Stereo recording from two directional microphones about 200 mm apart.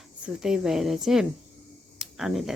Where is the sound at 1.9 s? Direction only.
Centre (ahead or behind).